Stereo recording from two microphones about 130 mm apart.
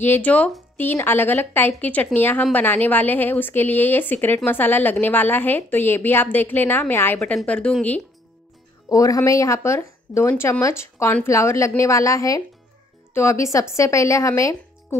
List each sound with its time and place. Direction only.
0.0 s a woman's voice: 15° left (ahead or behind)
7.2 s a woman's voice: 5° left (ahead or behind)
8.8 s speech: 25° left (ahead or behind)